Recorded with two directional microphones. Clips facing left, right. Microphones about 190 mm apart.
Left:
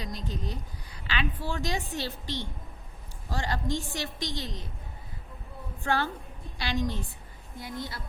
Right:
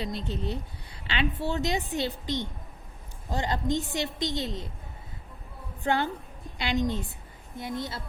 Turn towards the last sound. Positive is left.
turn(degrees=-25)  # may be behind; listen again after turning